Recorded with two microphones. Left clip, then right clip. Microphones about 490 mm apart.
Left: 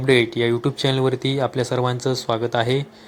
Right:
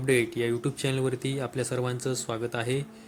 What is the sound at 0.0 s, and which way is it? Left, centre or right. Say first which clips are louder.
Speech: left 8 dB; right.